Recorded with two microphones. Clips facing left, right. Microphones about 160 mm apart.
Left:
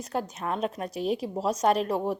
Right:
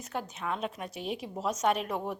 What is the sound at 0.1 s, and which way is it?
A woman's voice, 40° left (ahead or behind).